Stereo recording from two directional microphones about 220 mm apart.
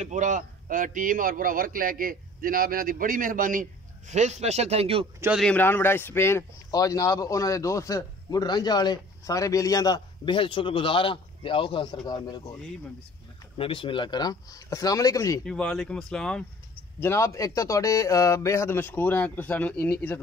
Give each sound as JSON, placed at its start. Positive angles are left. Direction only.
{"t": 0.0, "sound": "a man's voice", "side_deg": -35}
{"t": 5.2, "sound": "speech", "side_deg": 0}
{"t": 13.6, "sound": "speech", "side_deg": 25}
{"t": 15.4, "sound": "speech", "side_deg": 5}